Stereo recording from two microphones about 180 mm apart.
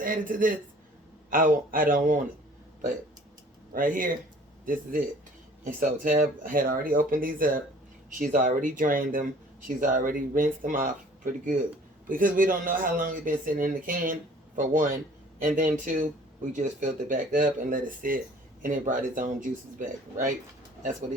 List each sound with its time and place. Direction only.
0.0 s speech: 50° right (ahead or behind)
3.8 s speech: 50° right (ahead or behind)